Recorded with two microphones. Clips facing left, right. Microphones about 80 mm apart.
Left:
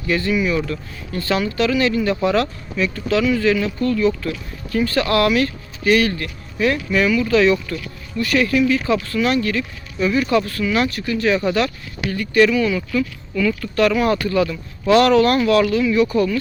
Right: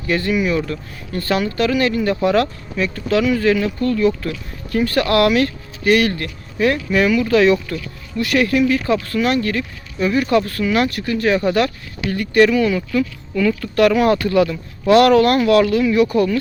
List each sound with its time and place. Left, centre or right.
0.1 s speech: right
0.5 s speech: right